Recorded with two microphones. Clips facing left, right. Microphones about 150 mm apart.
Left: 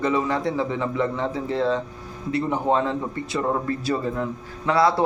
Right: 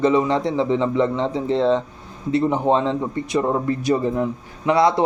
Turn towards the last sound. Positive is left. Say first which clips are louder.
# right 3 dB
turn(degrees=-20)  # may be behind; listen again after turning